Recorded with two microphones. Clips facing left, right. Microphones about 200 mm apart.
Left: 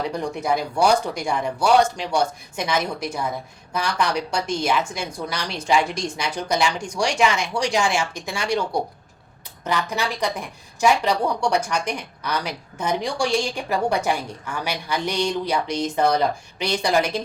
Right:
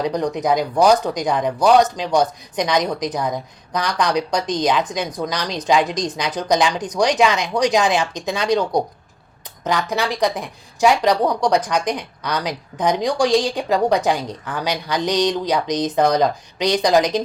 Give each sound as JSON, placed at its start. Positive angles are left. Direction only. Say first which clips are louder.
{"t": 0.0, "sound": "a woman's voice", "louder": "right 5 dB", "side_deg": -15}